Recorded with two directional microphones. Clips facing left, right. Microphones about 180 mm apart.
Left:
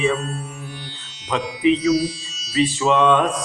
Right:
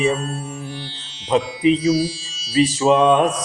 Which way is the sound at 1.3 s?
30° right (ahead or behind).